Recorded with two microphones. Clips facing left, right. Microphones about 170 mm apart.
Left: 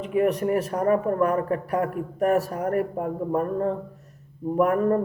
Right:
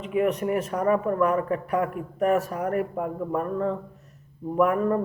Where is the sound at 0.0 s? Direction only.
40° left (ahead or behind).